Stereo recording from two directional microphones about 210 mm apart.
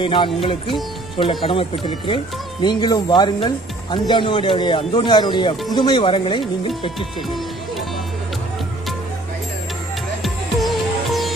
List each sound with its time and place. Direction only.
0.0 s speech: 25° left (ahead or behind)
7.0 s speech: centre (ahead or behind)
10.2 s music: centre (ahead or behind)